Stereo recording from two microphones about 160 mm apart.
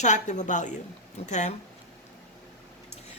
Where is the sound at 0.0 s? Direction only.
45° left (ahead or behind).